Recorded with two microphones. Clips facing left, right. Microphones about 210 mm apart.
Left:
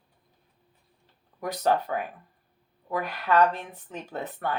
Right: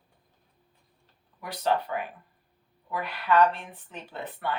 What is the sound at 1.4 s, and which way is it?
Speech, 45° left (ahead or behind).